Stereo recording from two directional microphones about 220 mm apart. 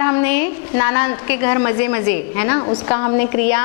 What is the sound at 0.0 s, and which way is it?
A woman's voice, 15° left (ahead or behind).